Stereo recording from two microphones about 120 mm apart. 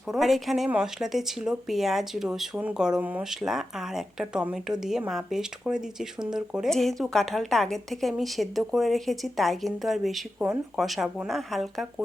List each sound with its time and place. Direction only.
0.1 s speech: centre (ahead or behind)